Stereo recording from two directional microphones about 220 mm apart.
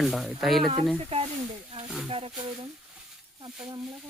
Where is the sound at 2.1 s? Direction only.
25° right (ahead or behind).